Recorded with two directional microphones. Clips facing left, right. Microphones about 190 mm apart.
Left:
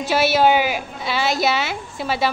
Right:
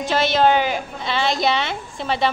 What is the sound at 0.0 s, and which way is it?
A woman's voice, 10° left (ahead or behind).